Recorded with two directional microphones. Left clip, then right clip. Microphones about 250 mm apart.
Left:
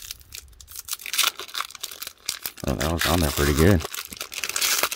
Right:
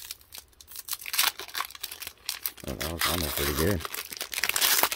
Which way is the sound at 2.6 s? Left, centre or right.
Left.